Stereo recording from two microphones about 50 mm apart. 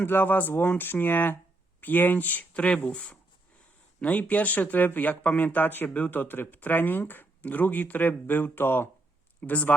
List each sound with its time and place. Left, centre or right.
0.0 s speech: left
9.4 s speech: left